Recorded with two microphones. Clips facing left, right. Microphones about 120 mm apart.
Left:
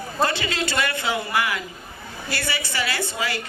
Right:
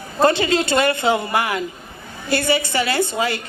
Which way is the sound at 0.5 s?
20° right (ahead or behind).